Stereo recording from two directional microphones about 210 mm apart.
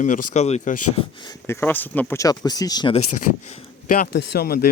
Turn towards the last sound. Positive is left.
turn(degrees=45)  # may be behind; listen again after turning